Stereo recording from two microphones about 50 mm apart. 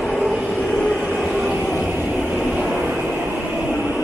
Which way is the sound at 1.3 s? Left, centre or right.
Centre.